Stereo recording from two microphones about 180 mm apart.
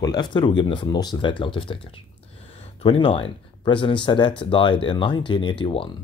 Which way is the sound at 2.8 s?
30° left (ahead or behind).